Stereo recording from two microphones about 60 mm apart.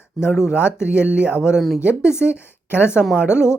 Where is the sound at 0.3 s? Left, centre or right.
Centre.